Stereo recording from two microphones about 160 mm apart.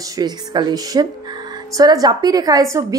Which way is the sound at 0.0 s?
25° right (ahead or behind).